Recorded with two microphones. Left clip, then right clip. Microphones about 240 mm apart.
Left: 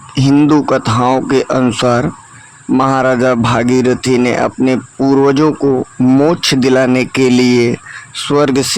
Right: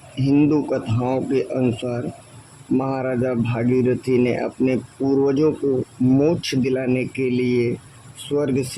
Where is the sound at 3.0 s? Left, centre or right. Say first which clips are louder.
Left 11 dB; left.